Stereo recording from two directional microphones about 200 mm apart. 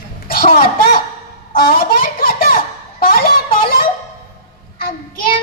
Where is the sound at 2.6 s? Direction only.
45° left (ahead or behind).